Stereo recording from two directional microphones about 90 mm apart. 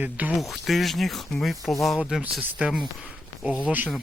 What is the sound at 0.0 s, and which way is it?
Speech, 15° right (ahead or behind).